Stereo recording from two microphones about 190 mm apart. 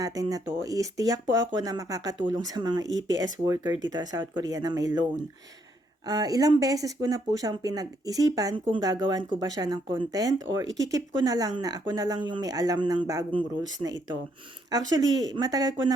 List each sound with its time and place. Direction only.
0.0 s speech: 20° right (ahead or behind)
2.8 s speech: 75° right (ahead or behind)
3.2 s speech: 20° right (ahead or behind)
6.1 s speech: 20° right (ahead or behind)